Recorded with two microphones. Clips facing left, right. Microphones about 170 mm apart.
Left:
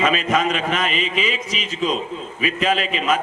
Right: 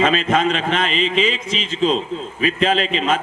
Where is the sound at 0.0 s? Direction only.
30° right (ahead or behind).